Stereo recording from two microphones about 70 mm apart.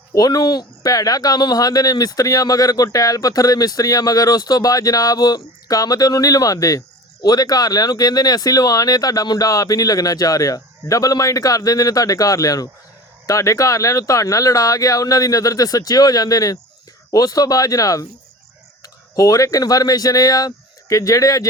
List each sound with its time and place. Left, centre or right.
0.2 s speech: left
9.5 s speech: left